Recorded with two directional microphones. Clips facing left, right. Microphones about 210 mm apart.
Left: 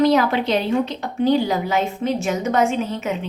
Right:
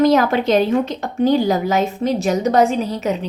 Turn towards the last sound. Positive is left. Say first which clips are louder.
# right 3 dB
turn(degrees=-35)  # may be behind; listen again after turning